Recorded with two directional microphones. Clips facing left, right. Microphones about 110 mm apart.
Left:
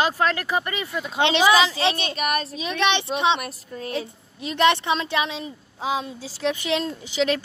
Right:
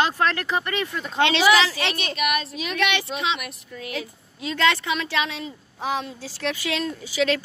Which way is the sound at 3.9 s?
25° left (ahead or behind).